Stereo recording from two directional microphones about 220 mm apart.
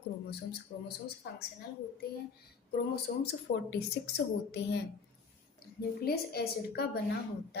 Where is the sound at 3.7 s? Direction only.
50° left (ahead or behind).